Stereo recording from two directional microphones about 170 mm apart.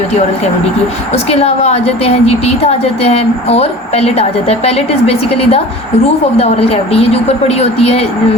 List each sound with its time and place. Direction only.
1.1 s a woman's voice: 35° left (ahead or behind)